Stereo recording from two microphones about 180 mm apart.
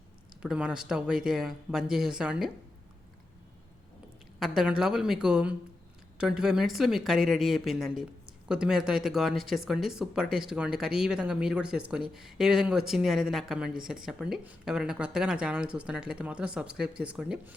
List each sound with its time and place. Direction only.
0.4 s speech: 5° right (ahead or behind)
4.4 s speech: centre (ahead or behind)